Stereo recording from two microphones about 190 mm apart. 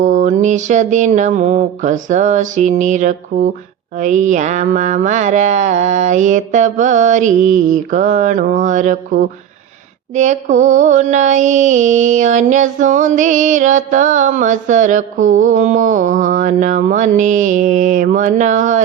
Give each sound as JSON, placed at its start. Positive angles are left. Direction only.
{"t": 0.0, "sound": "mantra", "side_deg": -40}
{"t": 10.2, "sound": "mantra", "side_deg": -40}